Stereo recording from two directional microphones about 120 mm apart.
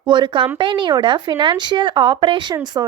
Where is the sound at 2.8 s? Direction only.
30° right (ahead or behind).